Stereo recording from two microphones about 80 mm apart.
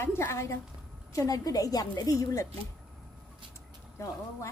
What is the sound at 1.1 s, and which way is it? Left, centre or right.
A woman's voice, left.